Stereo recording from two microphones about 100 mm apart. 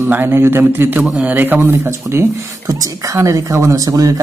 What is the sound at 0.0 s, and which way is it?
Speech, 20° right (ahead or behind).